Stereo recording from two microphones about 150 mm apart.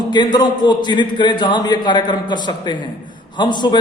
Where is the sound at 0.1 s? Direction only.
30° left (ahead or behind).